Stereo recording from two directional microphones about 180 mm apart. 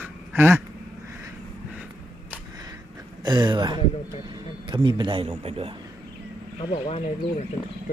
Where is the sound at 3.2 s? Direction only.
25° right (ahead or behind).